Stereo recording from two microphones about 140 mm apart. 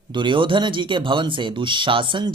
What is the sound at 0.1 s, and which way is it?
Speech, 35° right (ahead or behind).